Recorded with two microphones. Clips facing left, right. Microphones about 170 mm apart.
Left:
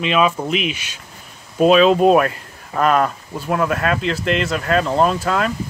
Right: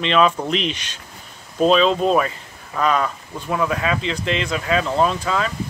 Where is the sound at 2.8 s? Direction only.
55° left (ahead or behind).